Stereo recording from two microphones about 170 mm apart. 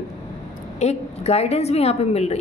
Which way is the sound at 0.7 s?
40° left (ahead or behind).